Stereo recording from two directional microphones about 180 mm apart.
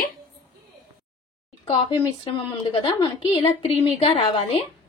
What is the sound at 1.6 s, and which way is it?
A woman's voice, 30° left (ahead or behind).